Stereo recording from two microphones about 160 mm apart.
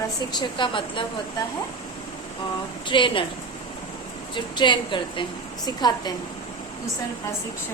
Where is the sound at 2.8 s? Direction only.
30° left (ahead or behind).